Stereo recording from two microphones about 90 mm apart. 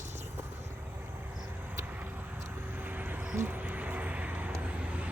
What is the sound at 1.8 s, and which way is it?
Vehicle, 20° right (ahead or behind).